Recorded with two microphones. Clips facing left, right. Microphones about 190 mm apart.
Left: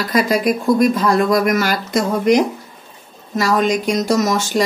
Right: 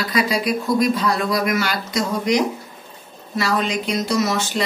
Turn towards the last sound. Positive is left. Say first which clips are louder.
# left 4 dB
turn(degrees=45)  # may be behind; listen again after turning